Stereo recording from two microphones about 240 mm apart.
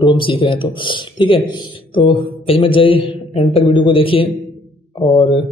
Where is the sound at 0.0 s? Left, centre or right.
Left.